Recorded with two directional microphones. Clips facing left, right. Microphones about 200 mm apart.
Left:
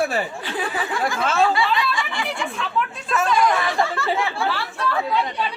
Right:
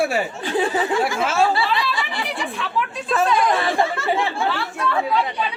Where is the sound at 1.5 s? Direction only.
35° right (ahead or behind).